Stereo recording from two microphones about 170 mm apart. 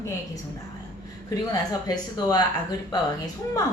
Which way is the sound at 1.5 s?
20° left (ahead or behind).